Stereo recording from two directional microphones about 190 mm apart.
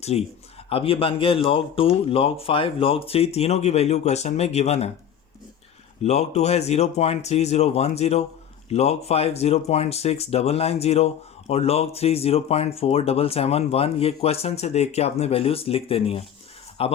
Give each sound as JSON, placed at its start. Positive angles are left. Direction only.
{"t": 0.0, "sound": "speech", "side_deg": 35}
{"t": 6.0, "sound": "speech", "side_deg": 35}